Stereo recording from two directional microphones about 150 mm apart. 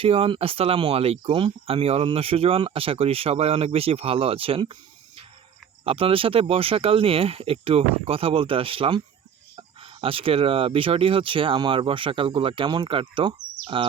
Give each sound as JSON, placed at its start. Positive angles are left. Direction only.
{"t": 0.0, "sound": "speech", "side_deg": -40}